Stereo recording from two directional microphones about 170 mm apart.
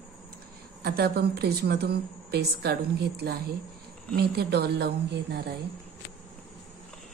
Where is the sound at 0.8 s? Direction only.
70° right (ahead or behind).